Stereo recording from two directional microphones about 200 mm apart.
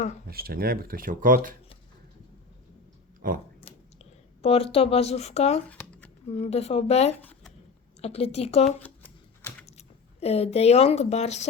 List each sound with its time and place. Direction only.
0.3 s speech: 50° right (ahead or behind)
3.2 s speech: 45° right (ahead or behind)
3.6 s whispering: 30° left (ahead or behind)
4.4 s a woman's voice: 30° left (ahead or behind)
5.6 s a sound: 5° left (ahead or behind)
6.3 s a woman's voice: 30° left (ahead or behind)
8.8 s a sound: 10° left (ahead or behind)
10.2 s a woman's voice: 30° left (ahead or behind)